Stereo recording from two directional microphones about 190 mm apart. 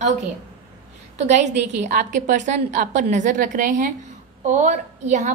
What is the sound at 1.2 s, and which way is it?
A woman's voice, 40° right (ahead or behind).